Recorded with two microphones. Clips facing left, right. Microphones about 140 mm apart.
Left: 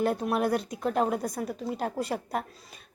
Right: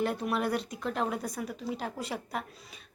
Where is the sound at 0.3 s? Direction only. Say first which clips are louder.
Left 4 dB; 45° left (ahead or behind).